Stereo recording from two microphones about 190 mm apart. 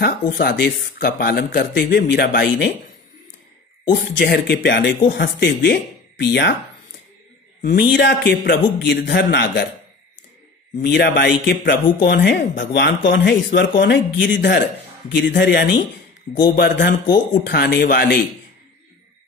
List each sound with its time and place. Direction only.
0.0 s speech: 55° left (ahead or behind)
3.9 s speech: 60° left (ahead or behind)
7.9 s speech: 65° left (ahead or behind)
10.8 s speech: 60° left (ahead or behind)